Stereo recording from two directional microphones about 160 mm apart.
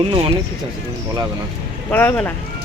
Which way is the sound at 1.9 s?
10° left (ahead or behind).